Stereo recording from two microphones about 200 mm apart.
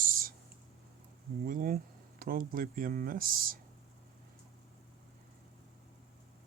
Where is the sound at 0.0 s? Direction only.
45° right (ahead or behind).